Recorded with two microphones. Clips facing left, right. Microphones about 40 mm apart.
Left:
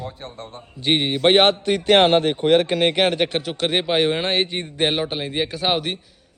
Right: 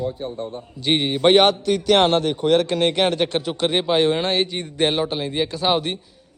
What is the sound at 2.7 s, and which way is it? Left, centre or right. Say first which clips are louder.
A man's voice: left 1 dB; centre.